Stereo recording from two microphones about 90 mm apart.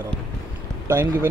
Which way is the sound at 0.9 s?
25° right (ahead or behind).